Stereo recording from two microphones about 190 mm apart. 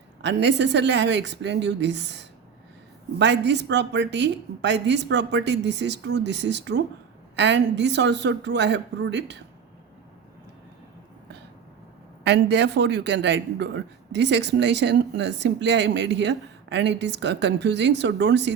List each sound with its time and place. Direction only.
0.2 s a woman's voice: 65° right (ahead or behind)
12.2 s a man's voice: 65° right (ahead or behind)